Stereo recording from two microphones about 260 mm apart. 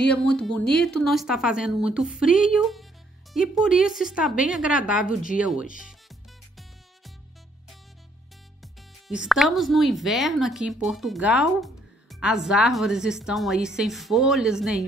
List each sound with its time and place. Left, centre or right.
0.0 s speech: centre
5.0 s speech: left
5.4 s speech: centre
9.0 s speech: centre